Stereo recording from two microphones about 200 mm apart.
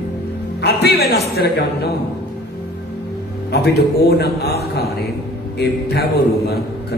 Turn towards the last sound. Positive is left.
turn(degrees=50)  # may be behind; listen again after turning